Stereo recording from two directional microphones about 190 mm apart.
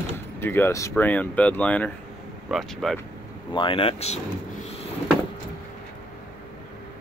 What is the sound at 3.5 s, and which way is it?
Speech, 25° left (ahead or behind).